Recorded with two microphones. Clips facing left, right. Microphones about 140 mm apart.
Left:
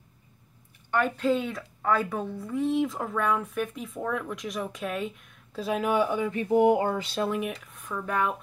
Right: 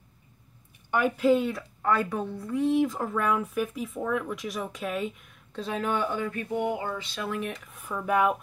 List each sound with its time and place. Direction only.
0.9 s speech: 10° right (ahead or behind); by 6.4 s 15° left (ahead or behind)
6.5 s a sound: 40° left (ahead or behind)
7.2 s speech: 15° left (ahead or behind)
7.6 s speech: 5° right (ahead or behind)